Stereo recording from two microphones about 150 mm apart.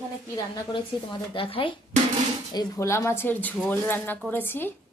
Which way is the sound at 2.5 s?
25° left (ahead or behind).